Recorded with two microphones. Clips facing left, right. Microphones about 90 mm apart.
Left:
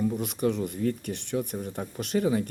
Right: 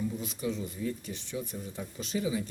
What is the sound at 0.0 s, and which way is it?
Speech, 65° left (ahead or behind).